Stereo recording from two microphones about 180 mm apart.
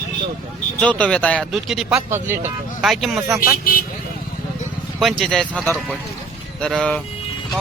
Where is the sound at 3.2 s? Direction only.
15° right (ahead or behind).